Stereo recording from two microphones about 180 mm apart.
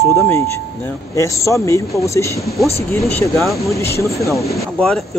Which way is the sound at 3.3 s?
Centre (ahead or behind).